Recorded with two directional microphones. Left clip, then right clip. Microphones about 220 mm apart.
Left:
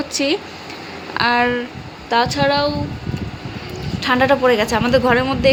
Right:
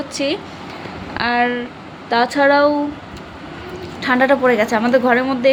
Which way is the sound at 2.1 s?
5° right (ahead or behind).